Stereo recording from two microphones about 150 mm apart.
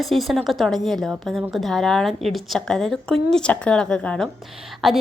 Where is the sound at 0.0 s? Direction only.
Centre (ahead or behind).